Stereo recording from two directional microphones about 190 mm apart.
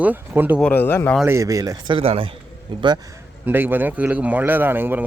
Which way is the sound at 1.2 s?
15° right (ahead or behind).